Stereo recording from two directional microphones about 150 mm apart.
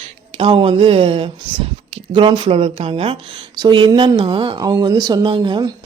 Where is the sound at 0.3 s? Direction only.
40° right (ahead or behind).